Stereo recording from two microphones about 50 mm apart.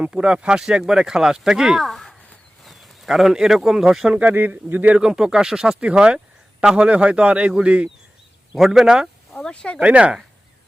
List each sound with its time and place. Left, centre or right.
0.1 s speech: centre
1.8 s a sound: centre
2.6 s speech: centre
4.2 s speech: right
4.9 s speech: centre
5.8 s speech: centre
8.5 s speech: centre
9.3 s speech: centre
9.8 s speech: right